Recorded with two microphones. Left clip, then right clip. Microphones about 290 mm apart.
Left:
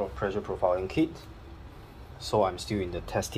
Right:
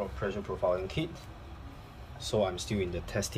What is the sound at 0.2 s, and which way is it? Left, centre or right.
Speech, centre.